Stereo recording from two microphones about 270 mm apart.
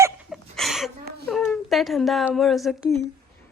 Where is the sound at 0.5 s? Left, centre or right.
Centre.